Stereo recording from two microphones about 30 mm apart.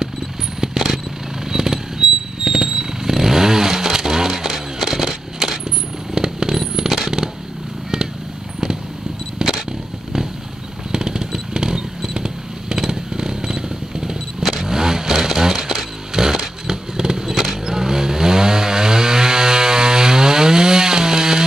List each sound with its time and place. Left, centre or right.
1.5 s motorcycle: centre
6.1 s vehicle: right
9.4 s vehicle: centre
10.9 s a sound: right
14.4 s vehicle: centre
17.3 s vehicle: centre
17.6 s chainsaw: centre